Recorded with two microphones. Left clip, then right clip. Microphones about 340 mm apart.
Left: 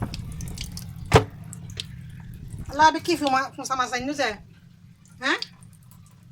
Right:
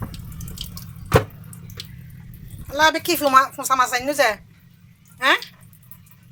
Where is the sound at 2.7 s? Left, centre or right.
Centre.